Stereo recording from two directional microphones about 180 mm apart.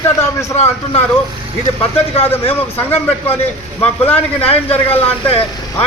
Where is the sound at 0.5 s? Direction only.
35° left (ahead or behind).